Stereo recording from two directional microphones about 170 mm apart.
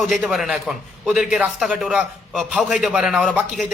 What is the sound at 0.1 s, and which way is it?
A man's voice, centre (ahead or behind).